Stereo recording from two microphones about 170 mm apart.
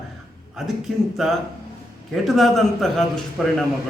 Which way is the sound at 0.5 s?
Centre (ahead or behind).